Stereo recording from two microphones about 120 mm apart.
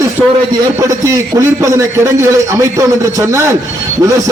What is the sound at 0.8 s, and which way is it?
A man's voice, 25° right (ahead or behind).